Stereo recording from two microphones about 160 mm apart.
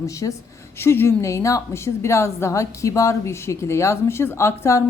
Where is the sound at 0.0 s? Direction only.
20° left (ahead or behind).